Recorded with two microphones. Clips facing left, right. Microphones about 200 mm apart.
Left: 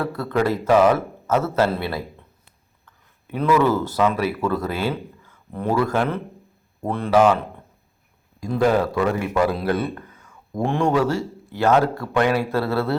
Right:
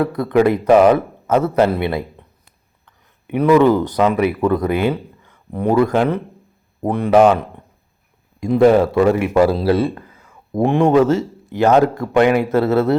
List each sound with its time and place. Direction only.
0.0 s speech: 20° right (ahead or behind)
3.3 s a man's voice: 15° right (ahead or behind)
9.7 s a sound: 30° right (ahead or behind)
10.6 s a man's voice: 20° right (ahead or behind)